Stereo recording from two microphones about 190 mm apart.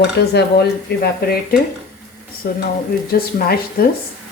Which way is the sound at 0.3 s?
60° left (ahead or behind).